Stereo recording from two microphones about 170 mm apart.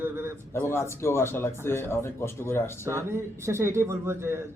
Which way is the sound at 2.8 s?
15° right (ahead or behind).